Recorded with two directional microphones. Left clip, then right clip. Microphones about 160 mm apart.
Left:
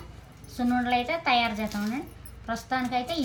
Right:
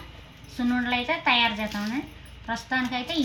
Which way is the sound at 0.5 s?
45° left (ahead or behind).